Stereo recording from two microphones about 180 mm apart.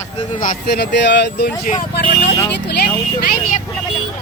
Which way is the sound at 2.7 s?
65° left (ahead or behind).